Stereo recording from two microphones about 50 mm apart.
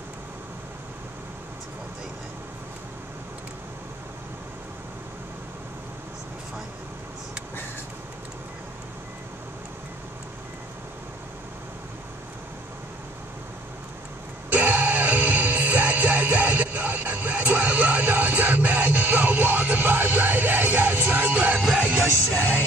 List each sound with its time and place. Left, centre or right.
14.5 s music: right
22.3 s music: left